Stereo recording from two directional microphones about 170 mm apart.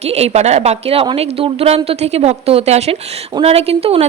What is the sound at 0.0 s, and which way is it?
A woman's voice, 40° right (ahead or behind).